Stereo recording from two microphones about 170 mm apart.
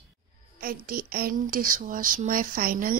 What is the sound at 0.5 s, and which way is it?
Speech, 60° right (ahead or behind).